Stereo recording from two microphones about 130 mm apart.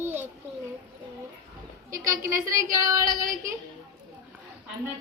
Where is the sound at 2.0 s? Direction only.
25° right (ahead or behind).